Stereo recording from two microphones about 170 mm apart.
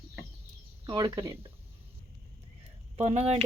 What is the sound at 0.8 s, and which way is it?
Speech, 25° right (ahead or behind).